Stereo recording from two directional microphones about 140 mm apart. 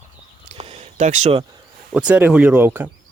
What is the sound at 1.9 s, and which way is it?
Speech, 5° right (ahead or behind).